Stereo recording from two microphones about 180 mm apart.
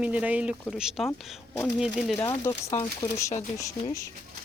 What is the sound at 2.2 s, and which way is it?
Speech, 20° left (ahead or behind).